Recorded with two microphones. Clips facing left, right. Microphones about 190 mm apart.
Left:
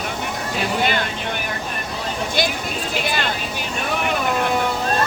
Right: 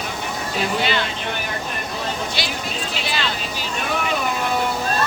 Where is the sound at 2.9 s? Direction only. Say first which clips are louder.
Left 4 dB; 50° left (ahead or behind).